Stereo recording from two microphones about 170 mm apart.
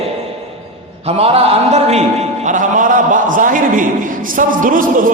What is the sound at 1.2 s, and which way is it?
Speech, 40° right (ahead or behind).